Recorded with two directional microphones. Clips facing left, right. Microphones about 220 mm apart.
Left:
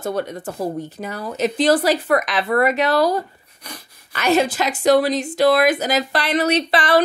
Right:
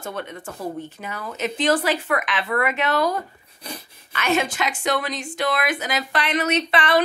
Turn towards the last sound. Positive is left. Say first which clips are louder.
# left 3 dB
turn(degrees=35)  # may be behind; listen again after turning